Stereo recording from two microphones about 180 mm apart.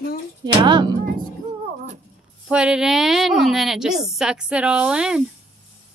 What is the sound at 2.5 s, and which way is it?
A woman's voice, 5° right (ahead or behind).